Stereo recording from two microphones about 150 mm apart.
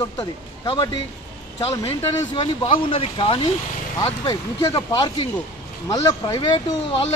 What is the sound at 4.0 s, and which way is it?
A man's voice, 20° left (ahead or behind).